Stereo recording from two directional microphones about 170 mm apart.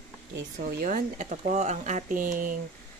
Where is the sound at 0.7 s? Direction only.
55° right (ahead or behind).